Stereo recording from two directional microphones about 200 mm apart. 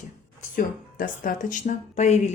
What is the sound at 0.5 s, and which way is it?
A woman's voice, 40° left (ahead or behind).